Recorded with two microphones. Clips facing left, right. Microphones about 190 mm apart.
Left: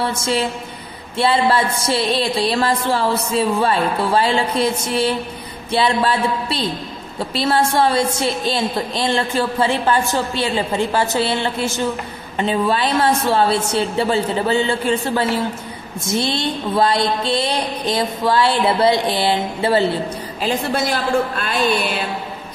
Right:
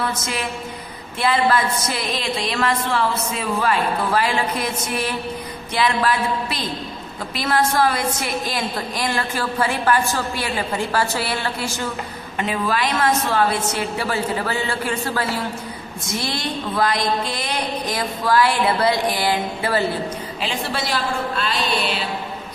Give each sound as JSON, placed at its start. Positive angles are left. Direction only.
{"t": 0.0, "sound": "a woman's voice", "side_deg": 30}
{"t": 20.4, "sound": "a woman's voice", "side_deg": 45}